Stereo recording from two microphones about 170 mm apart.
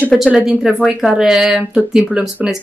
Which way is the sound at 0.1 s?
5° right (ahead or behind).